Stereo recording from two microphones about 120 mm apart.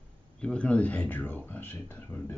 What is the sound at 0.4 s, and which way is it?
Speech, 10° left (ahead or behind).